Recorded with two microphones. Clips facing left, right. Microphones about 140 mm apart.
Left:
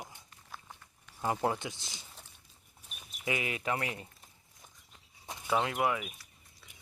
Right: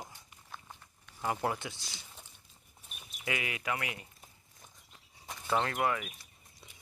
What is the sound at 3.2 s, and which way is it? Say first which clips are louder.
Speech: left 2 dB; 20° left (ahead or behind).